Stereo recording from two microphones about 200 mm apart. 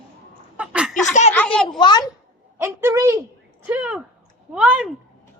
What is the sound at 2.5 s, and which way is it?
A woman's voice, 10° right (ahead or behind).